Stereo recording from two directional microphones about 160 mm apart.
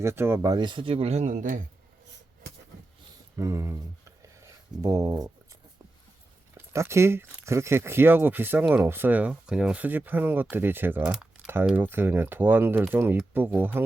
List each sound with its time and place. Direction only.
0.0 s speech: 15° right (ahead or behind); by 1.6 s 55° right (ahead or behind)
3.3 s a sound: 20° right (ahead or behind)
6.5 s speech: 15° right (ahead or behind)